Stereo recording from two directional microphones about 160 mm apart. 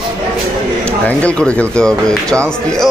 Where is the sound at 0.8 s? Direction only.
10° left (ahead or behind).